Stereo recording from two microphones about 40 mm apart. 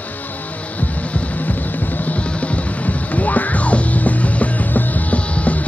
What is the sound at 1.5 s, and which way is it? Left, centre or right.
Music, left.